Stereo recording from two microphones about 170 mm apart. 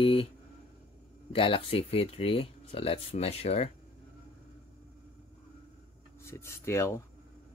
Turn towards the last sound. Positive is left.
turn(degrees=15)  # may be behind; listen again after turning